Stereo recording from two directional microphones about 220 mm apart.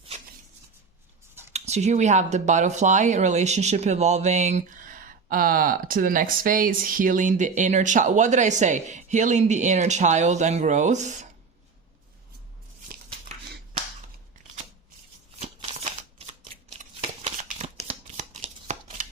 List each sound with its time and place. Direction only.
1.5 s speech: 30° right (ahead or behind)
15.4 s shuffling cards: 30° right (ahead or behind)